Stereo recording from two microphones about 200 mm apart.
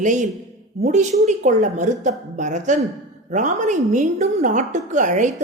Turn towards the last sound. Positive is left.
turn(degrees=-40)  # may be behind; listen again after turning